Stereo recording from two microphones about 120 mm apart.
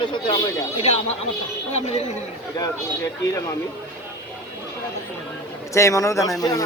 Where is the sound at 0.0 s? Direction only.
40° left (ahead or behind).